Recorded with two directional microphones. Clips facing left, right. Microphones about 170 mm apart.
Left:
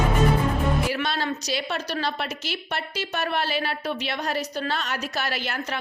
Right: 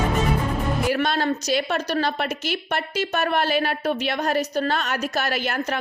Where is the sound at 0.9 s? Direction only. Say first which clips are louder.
Right 5 dB; 50° right (ahead or behind).